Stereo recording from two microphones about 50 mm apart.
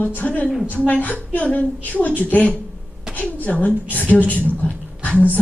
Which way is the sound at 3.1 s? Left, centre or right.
Left.